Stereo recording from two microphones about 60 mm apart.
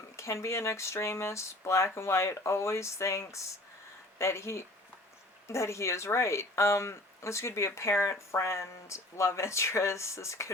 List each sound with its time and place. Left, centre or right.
0.2 s speech: left